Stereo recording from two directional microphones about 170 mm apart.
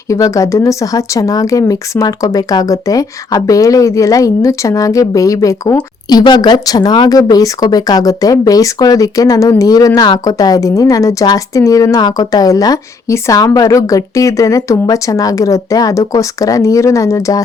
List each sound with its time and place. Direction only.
0.1 s speech: 20° left (ahead or behind)